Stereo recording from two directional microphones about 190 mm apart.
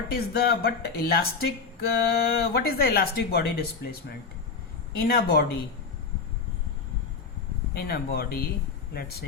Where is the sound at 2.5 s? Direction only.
55° left (ahead or behind).